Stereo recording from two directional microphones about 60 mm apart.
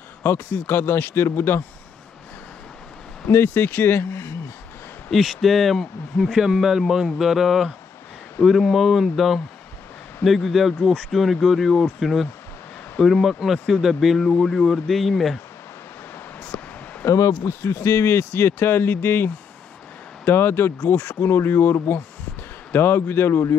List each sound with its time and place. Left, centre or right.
0.2 s speech: left
3.3 s speech: left
5.1 s speech: centre
16.5 s a sound: left
17.5 s speech: left